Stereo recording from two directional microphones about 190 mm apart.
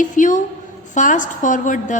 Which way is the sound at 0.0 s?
40° left (ahead or behind).